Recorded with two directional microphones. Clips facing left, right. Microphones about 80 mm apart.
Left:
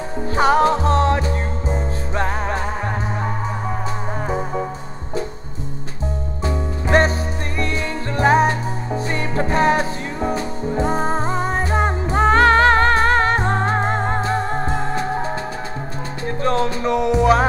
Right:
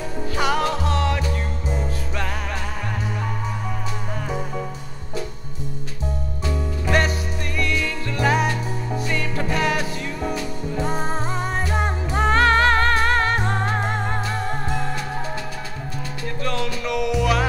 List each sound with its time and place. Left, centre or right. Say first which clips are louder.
0.4 s music: left 7 dB; left
6.4 s music: left 3 dB; left
16.4 s music: left 7 dB; left